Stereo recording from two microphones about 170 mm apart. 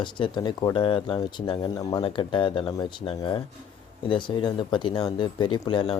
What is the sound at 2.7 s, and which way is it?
Speech, 20° left (ahead or behind).